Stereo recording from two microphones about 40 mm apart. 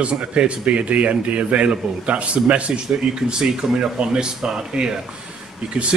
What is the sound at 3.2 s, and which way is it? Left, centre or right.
A man's voice, right.